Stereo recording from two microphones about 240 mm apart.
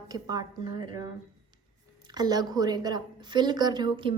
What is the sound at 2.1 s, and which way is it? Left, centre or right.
A woman's voice, centre.